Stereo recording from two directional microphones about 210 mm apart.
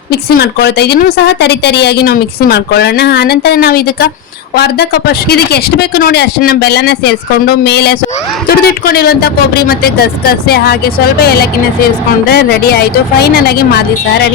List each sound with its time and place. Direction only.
0.1 s a woman's voice: 50° left (ahead or behind)